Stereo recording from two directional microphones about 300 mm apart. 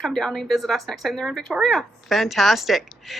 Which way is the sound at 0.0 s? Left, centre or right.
Centre.